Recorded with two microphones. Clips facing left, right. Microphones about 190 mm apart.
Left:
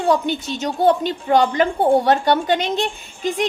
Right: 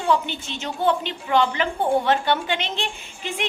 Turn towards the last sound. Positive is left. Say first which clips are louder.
# left 8 dB
turn(degrees=40)  # may be behind; listen again after turning